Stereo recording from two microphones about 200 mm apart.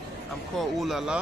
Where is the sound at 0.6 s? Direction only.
Centre (ahead or behind).